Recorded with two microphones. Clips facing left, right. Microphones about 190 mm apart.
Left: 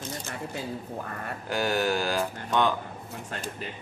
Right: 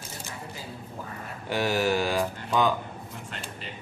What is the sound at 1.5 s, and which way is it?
Speech, centre (ahead or behind).